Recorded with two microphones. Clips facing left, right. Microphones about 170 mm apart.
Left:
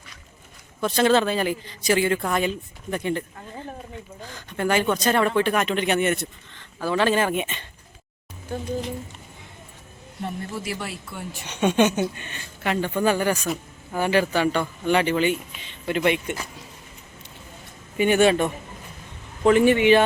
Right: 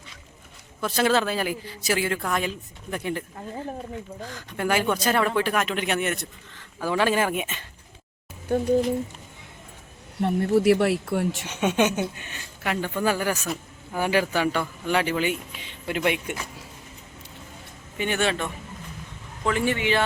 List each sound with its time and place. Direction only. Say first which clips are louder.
0.8 s speech: left 3 dB; 5° right (ahead or behind)
10.2 s a woman's voice: right 10 dB; 65° right (ahead or behind)
11.4 s speech: left 6 dB; 10° right (ahead or behind)
17.9 s speech: left 7 dB; 15° left (ahead or behind)